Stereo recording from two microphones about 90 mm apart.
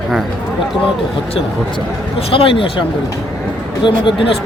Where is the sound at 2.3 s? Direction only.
85° left.